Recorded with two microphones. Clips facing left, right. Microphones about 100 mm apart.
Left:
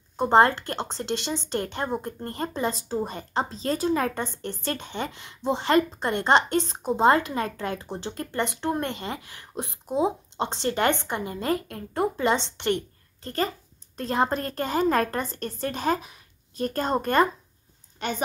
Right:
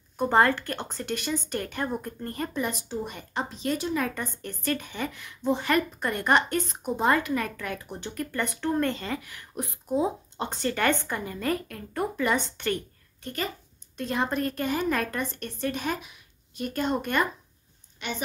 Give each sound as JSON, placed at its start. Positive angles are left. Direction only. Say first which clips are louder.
{"t": 0.2, "sound": "a woman's voice", "louder": "left 3 dB", "side_deg": 25}